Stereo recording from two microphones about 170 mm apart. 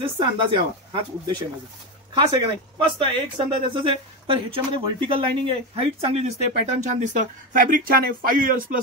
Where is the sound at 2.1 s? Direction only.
30° right (ahead or behind).